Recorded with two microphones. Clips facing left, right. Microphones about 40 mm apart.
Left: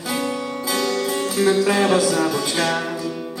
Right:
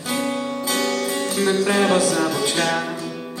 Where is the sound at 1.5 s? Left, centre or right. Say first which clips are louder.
Even; right.